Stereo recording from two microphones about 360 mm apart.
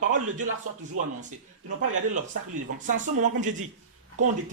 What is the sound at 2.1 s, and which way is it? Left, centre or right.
Speech, right.